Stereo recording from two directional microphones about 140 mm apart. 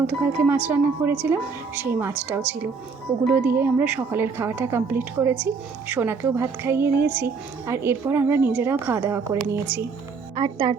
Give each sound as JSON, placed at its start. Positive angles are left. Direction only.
{"t": 0.1, "sound": "a woman's voice", "side_deg": -15}